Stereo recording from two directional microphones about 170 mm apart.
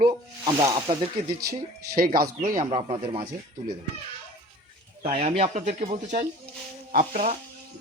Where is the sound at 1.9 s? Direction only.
60° right (ahead or behind).